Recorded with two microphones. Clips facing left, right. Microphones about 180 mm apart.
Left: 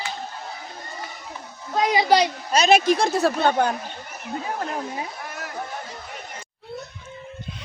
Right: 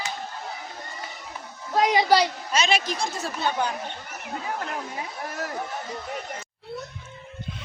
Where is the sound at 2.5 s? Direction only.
40° left (ahead or behind).